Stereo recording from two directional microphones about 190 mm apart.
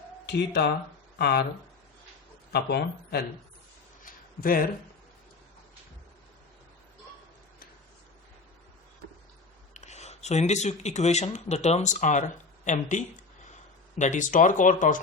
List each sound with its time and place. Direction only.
0.5 s speech: 60° left (ahead or behind)
2.5 s speech: 60° left (ahead or behind)
4.0 s a sound: 50° left (ahead or behind)
9.7 s speech: 35° left (ahead or behind)